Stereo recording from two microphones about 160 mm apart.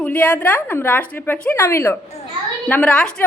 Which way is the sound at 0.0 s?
10° left (ahead or behind).